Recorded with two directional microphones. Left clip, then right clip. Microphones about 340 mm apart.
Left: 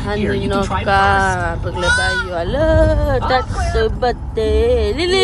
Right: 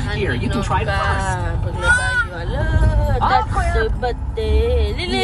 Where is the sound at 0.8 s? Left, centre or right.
Left.